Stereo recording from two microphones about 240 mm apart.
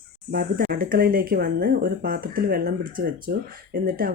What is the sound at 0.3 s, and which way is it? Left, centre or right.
Speech, right.